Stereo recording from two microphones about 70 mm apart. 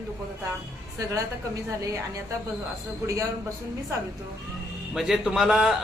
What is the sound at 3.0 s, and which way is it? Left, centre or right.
Speech, right.